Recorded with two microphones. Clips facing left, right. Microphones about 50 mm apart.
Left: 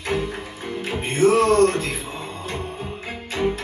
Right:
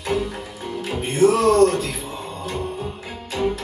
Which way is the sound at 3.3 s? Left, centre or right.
Left.